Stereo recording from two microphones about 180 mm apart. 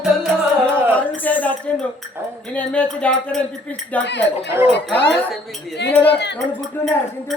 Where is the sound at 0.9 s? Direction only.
10° left (ahead or behind).